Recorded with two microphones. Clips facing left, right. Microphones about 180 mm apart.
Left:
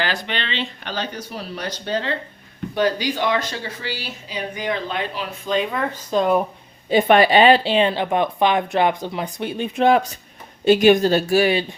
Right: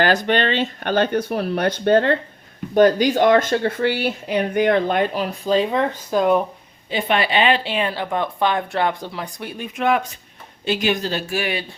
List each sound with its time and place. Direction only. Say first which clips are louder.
0.0 s speech: right 8 dB; 45° right (ahead or behind)
6.1 s speech: even; 5° right (ahead or behind)
6.9 s speech: left 6 dB; 45° left (ahead or behind)
10.7 s speech: left 8 dB; 50° left (ahead or behind)